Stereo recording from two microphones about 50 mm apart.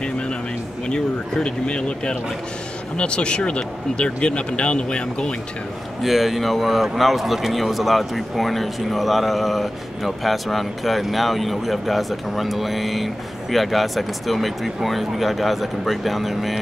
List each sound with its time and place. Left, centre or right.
0.8 s speech: centre
6.0 s a man's voice: centre